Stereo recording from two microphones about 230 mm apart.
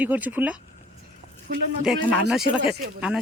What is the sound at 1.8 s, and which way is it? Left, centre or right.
Speech, centre.